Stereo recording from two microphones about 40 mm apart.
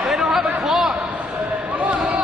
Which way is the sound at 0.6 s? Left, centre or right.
Centre.